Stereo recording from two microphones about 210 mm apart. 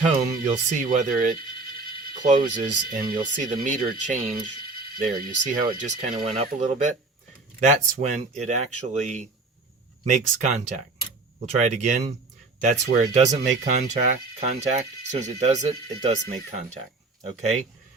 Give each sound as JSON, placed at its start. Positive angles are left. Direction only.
{"t": 0.0, "sound": "speech", "side_deg": -40}